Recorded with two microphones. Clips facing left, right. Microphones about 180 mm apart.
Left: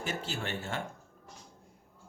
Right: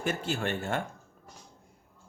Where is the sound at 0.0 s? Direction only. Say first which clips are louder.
Right 5 dB; 55° right (ahead or behind).